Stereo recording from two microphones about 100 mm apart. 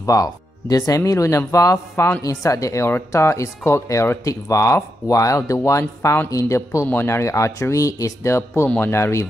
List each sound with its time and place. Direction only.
0.0 s speech: 40° left (ahead or behind)